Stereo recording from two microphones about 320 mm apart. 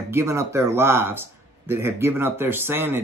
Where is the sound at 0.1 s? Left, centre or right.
Centre.